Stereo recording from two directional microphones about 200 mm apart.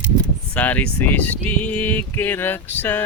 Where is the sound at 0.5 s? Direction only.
5° left (ahead or behind).